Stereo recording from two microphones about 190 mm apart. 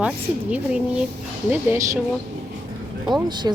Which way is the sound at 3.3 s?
25° right (ahead or behind).